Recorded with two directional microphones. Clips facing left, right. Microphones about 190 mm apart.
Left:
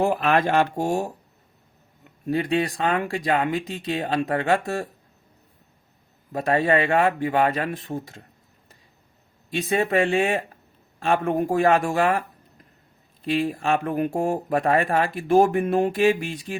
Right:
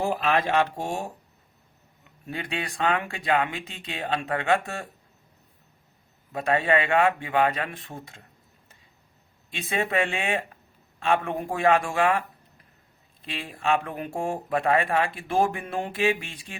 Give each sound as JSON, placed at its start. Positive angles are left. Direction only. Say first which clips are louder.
{"t": 0.0, "sound": "speech", "louder": "left 4 dB", "side_deg": 50}
{"t": 2.2, "sound": "speech", "louder": "left 10 dB", "side_deg": 35}
{"t": 6.3, "sound": "speech", "louder": "left 3 dB", "side_deg": 40}
{"t": 9.5, "sound": "speech", "louder": "left 6 dB", "side_deg": 40}
{"t": 13.2, "sound": "speech", "louder": "left 6 dB", "side_deg": 35}